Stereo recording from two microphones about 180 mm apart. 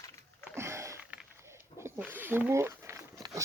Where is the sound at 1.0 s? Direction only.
5° right (ahead or behind).